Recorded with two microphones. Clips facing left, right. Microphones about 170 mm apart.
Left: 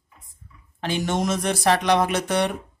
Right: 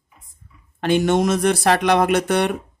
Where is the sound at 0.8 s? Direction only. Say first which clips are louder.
Right 7 dB; 60° right (ahead or behind).